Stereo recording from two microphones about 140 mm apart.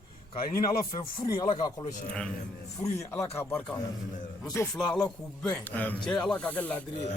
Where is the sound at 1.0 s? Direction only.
30° left (ahead or behind).